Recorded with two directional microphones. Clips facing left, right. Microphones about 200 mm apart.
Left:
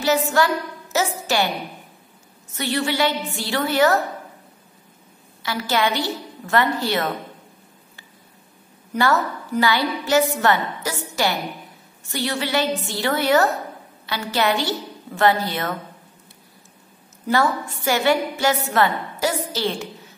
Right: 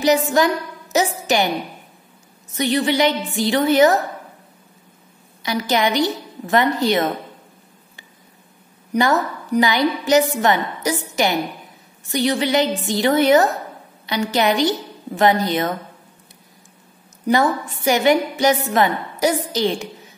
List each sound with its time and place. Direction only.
0.4 s a woman's voice: 20° right (ahead or behind)
2.5 s a woman's voice: 15° right (ahead or behind)
5.4 s a woman's voice: 15° right (ahead or behind)
8.9 s a woman's voice: 15° right (ahead or behind)
17.3 s a woman's voice: 15° right (ahead or behind)